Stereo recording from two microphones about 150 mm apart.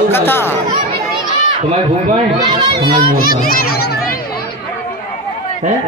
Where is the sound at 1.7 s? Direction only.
45° right (ahead or behind).